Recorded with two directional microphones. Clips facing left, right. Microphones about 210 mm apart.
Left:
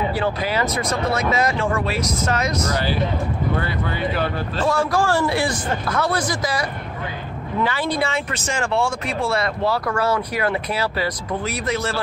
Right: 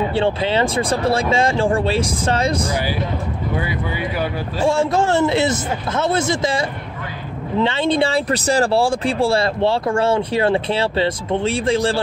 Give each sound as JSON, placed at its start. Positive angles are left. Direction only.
{"t": 0.1, "sound": "speech", "side_deg": -25}
{"t": 2.7, "sound": "speech", "side_deg": -10}
{"t": 4.6, "sound": "speech", "side_deg": -25}